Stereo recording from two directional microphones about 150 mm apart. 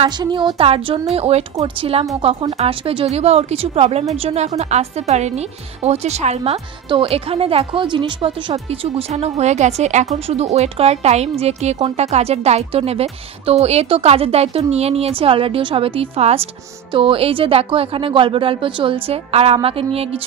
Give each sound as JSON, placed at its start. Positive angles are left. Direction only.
{"t": 0.0, "sound": "a woman's voice", "side_deg": -30}
{"t": 8.6, "sound": "a woman's voice", "side_deg": -45}